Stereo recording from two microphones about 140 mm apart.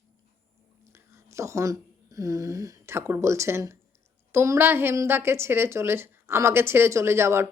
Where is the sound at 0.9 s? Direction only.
20° right (ahead or behind).